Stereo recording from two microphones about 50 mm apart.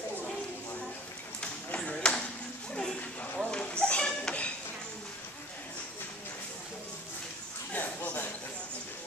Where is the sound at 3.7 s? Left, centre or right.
Centre.